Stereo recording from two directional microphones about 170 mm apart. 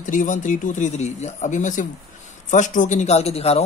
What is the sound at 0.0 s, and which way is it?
A man's voice, 50° left (ahead or behind).